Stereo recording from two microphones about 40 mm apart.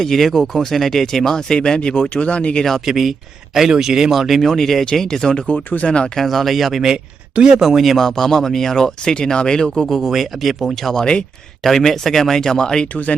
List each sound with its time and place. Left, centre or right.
0.0 s speech: centre; by 2.6 s left
2.8 s speech: centre
5.5 s speech: left
6.1 s speech: centre
10.1 s speech: centre
10.9 s speech: left
11.6 s speech: centre